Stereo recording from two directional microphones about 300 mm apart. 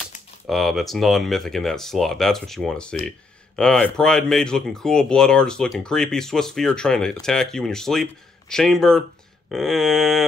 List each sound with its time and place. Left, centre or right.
0.5 s speech: centre